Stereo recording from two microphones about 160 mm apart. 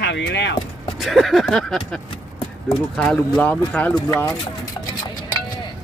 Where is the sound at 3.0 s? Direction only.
5° left (ahead or behind).